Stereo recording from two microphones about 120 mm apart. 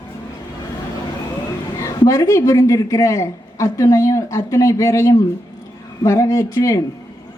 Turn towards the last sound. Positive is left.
turn(degrees=25)  # may be behind; listen again after turning